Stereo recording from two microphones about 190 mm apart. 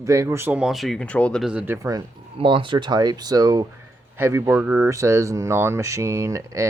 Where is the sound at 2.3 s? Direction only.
25° right (ahead or behind).